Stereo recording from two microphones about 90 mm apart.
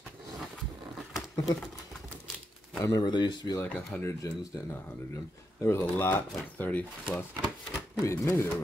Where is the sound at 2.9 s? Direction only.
55° left (ahead or behind).